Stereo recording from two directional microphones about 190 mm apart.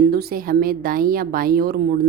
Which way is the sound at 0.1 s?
55° right (ahead or behind).